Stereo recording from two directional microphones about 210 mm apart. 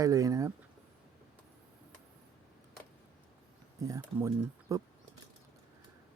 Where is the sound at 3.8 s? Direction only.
15° right (ahead or behind).